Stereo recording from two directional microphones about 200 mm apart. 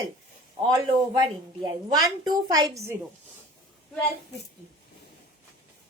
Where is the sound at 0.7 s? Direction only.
20° right (ahead or behind).